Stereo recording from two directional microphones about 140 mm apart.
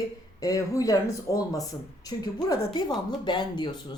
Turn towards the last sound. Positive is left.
turn(degrees=30)  # may be behind; listen again after turning